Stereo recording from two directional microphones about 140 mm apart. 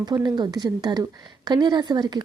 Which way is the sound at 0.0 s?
30° right (ahead or behind).